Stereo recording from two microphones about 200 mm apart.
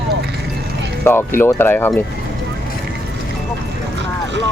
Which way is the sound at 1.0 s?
10° left (ahead or behind).